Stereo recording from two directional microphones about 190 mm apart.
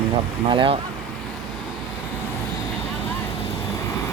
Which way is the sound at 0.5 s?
25° right (ahead or behind).